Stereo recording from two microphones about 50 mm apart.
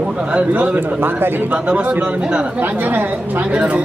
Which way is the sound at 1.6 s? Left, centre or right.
Right.